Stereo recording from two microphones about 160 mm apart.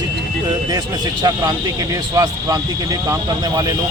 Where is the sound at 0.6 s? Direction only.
25° right (ahead or behind).